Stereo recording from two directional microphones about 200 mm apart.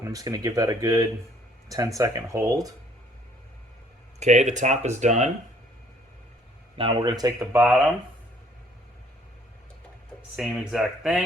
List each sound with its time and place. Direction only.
0.0 s speech: 15° right (ahead or behind)
4.2 s speech: 35° right (ahead or behind)
6.7 s speech: 25° right (ahead or behind)
7.6 s speech: 5° right (ahead or behind)
10.3 s speech: 5° right (ahead or behind)